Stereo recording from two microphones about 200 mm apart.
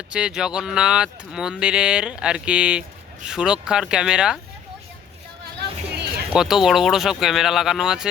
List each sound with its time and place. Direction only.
0.1 s speech: 5° right (ahead or behind)
5.5 s vehicle: 55° right (ahead or behind)
6.3 s speech: centre (ahead or behind)